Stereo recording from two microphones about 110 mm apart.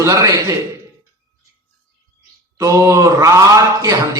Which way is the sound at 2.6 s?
30° right (ahead or behind).